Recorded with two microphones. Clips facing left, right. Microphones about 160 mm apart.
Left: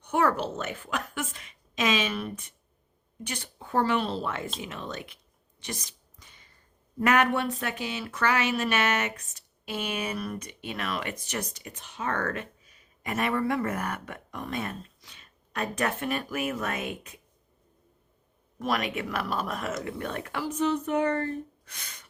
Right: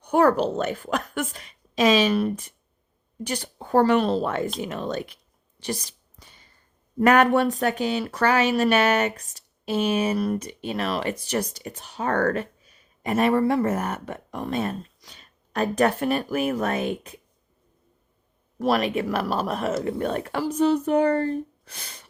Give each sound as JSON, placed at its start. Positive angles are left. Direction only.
{"t": 0.0, "sound": "a woman's voice", "side_deg": -40}
{"t": 5.5, "sound": "a sound", "side_deg": -35}
{"t": 7.0, "sound": "speech", "side_deg": -40}
{"t": 18.6, "sound": "speech", "side_deg": -30}